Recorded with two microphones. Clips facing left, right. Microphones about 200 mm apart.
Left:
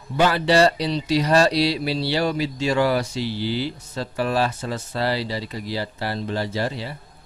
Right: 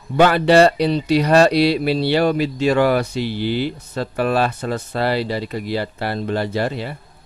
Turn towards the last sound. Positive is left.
turn(degrees=-60)  # may be behind; listen again after turning